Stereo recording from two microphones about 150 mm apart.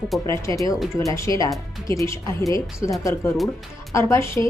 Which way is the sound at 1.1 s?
20° left (ahead or behind).